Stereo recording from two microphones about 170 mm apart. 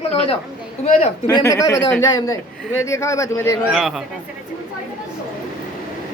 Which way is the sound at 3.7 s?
Centre (ahead or behind).